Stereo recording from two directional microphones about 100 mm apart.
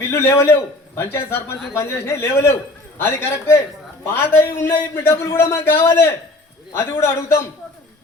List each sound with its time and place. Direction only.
0.1 s a man's voice: 25° left (ahead or behind)